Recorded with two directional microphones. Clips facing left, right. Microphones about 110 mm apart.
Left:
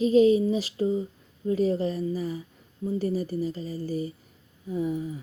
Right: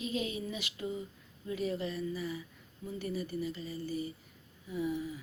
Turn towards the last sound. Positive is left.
turn(degrees=40)  # may be behind; listen again after turning